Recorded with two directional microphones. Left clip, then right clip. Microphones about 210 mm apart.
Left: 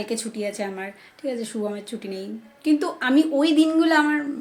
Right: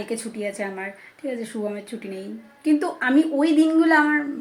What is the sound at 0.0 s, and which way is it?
A woman's voice, 5° left (ahead or behind).